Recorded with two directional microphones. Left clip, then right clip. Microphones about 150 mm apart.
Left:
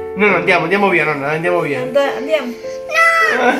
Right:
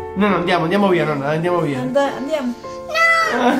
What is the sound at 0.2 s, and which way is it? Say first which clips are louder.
Speech: left 4 dB; 40° left (ahead or behind).